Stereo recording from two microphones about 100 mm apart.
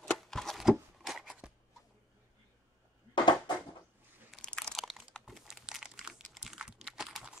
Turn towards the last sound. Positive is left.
turn(degrees=-5)  # may be behind; listen again after turning